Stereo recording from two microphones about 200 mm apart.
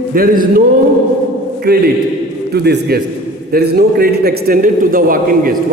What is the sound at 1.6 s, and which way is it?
A man's voice, 50° right (ahead or behind).